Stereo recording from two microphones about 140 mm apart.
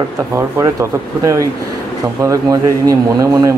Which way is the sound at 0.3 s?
20° right (ahead or behind).